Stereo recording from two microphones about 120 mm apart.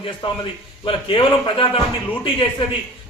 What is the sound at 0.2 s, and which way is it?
A man's voice, 45° left (ahead or behind).